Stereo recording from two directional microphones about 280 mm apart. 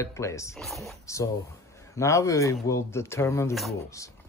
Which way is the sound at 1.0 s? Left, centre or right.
Centre.